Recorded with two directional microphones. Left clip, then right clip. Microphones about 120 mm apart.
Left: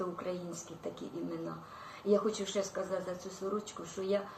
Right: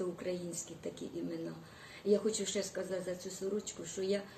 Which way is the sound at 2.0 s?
35° right (ahead or behind).